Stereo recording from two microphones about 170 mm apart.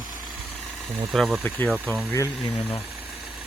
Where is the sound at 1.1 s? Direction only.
Centre (ahead or behind).